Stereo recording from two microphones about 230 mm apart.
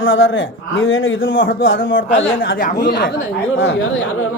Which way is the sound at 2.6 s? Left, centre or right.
Left.